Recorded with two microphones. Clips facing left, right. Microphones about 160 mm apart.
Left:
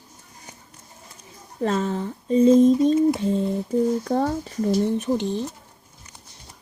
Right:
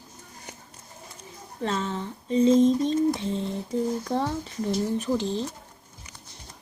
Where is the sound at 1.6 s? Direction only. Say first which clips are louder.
Left 5 dB; 50° left (ahead or behind).